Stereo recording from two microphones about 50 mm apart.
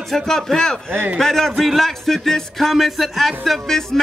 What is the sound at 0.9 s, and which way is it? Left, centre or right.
Speech, right.